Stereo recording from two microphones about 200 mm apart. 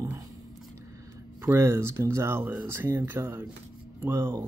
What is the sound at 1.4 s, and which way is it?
Speech, 15° right (ahead or behind).